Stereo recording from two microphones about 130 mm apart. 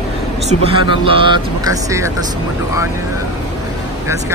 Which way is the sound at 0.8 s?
40° right (ahead or behind).